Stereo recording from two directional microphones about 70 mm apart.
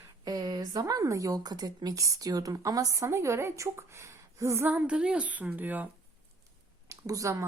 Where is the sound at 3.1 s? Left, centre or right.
Right.